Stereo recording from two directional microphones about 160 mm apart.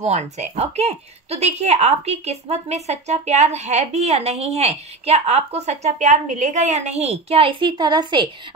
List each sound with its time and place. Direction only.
0.0 s a woman's voice: 45° right (ahead or behind)